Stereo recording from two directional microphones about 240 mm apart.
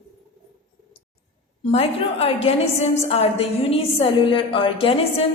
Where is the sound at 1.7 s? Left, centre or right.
Left.